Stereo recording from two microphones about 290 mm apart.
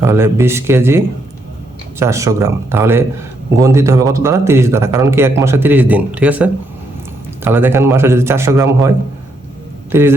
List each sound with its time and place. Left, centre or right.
0.0 s speech: centre
9.9 s speech: centre